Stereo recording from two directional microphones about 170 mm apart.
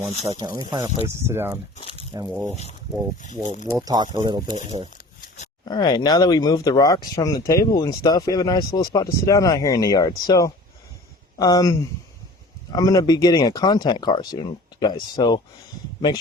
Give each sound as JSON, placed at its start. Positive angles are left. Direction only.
{"t": 0.2, "sound": "speech", "side_deg": -40}
{"t": 0.4, "sound": "speech", "side_deg": -25}
{"t": 1.0, "sound": "speech", "side_deg": -15}
{"t": 3.4, "sound": "speech", "side_deg": 5}
{"t": 3.8, "sound": "speech", "side_deg": -20}
{"t": 5.6, "sound": "speech", "side_deg": 25}